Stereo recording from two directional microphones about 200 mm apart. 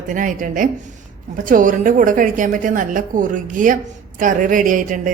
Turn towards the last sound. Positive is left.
turn(degrees=-40)  # may be behind; listen again after turning